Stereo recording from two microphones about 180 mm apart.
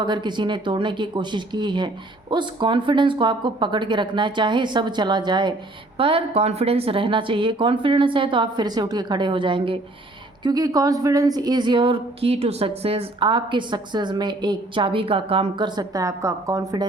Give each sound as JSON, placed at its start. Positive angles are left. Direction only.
{"t": 0.0, "sound": "a woman's voice", "side_deg": -25}